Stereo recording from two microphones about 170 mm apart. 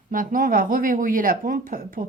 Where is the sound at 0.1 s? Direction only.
55° right (ahead or behind).